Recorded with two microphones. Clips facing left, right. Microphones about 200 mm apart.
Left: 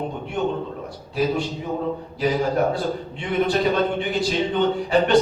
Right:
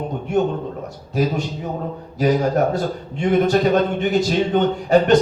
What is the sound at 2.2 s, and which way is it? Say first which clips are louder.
Speech: right 4 dB; 45° right (ahead or behind).